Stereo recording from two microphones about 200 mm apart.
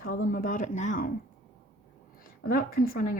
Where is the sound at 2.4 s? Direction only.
45° left (ahead or behind).